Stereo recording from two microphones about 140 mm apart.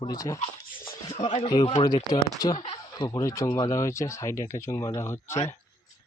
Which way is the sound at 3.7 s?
20° left (ahead or behind).